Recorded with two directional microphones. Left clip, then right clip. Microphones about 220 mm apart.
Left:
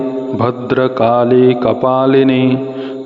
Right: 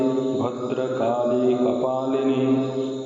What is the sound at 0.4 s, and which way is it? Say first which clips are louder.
A man's voice: left 11 dB; 50° left (ahead or behind).